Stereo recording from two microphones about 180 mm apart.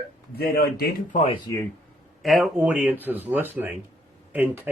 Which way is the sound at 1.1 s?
35° left (ahead or behind).